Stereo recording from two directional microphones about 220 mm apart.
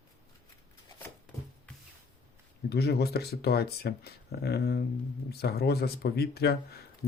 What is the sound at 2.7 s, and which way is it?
Speech, 45° left (ahead or behind).